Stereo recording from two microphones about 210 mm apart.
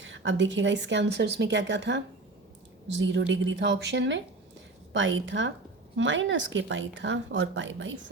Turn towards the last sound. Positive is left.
turn(degrees=-65)  # may be behind; listen again after turning